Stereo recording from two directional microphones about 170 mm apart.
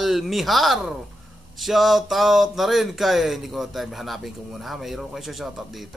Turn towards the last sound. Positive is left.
turn(degrees=0)  # may be behind; listen again after turning